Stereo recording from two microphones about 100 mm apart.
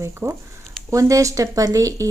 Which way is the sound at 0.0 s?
30° right (ahead or behind).